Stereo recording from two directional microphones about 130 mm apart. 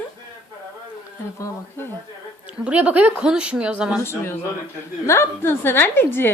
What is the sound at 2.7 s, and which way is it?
A woman's voice, 10° right (ahead or behind).